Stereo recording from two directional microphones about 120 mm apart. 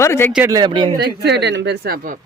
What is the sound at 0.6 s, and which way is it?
Speech, 45° right (ahead or behind).